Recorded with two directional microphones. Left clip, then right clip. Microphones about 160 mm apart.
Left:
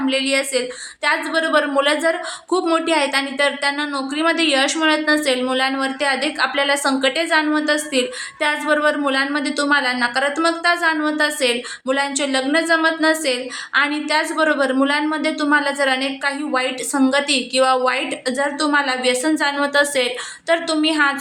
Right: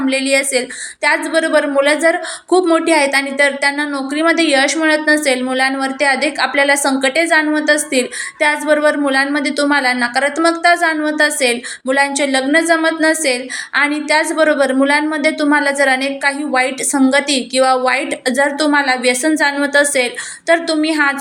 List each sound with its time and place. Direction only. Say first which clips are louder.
0.0 s a woman's voice: right 4 dB; 20° right (ahead or behind)